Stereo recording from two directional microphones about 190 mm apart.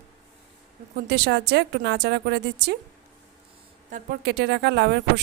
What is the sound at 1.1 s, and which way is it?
Speech, 60° right (ahead or behind).